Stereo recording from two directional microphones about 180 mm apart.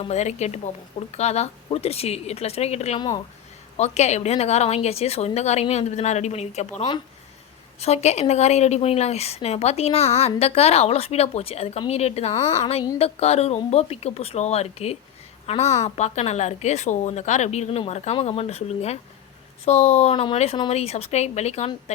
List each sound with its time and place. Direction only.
0.0 s a woman's voice: 40° left (ahead or behind)